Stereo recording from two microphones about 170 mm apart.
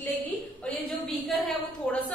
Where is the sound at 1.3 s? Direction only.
Centre (ahead or behind).